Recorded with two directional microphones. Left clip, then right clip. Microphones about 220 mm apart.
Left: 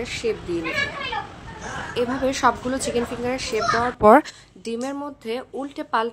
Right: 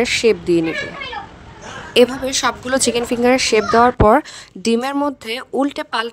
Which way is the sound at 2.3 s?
50° right (ahead or behind).